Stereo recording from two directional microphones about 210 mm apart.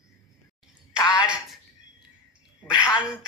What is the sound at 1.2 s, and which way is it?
Speech, 5° right (ahead or behind).